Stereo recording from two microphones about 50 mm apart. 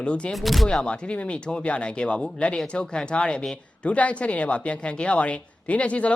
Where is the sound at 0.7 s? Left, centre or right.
Centre.